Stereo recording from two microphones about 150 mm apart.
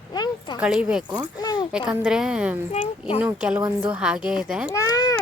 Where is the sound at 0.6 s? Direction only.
5° right (ahead or behind).